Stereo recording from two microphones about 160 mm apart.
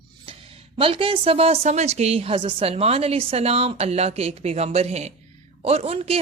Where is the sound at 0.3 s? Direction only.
35° right (ahead or behind).